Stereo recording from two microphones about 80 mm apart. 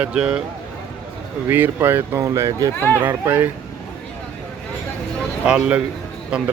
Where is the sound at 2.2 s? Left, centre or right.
Right.